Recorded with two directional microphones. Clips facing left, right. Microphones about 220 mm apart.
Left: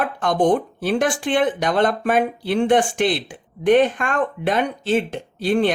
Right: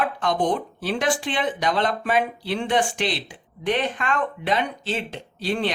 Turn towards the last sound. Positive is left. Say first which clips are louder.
# left 7 dB
turn(degrees=50)  # may be behind; listen again after turning